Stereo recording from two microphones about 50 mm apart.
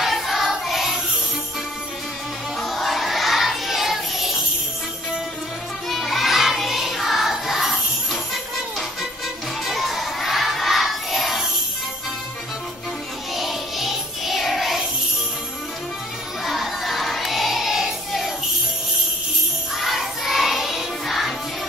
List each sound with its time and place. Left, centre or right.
0.0 s music: centre
2.7 s music: centre
5.9 s music: centre
9.7 s crowd: centre
13.4 s music: centre
16.4 s music: centre
19.8 s music: centre